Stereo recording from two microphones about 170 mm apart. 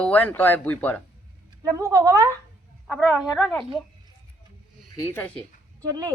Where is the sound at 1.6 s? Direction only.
20° right (ahead or behind).